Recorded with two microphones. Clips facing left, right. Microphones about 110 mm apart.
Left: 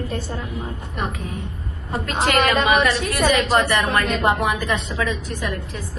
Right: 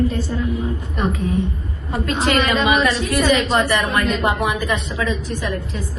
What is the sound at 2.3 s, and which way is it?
Speech, 60° left (ahead or behind).